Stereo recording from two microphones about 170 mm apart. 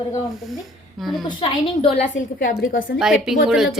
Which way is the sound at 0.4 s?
Centre (ahead or behind).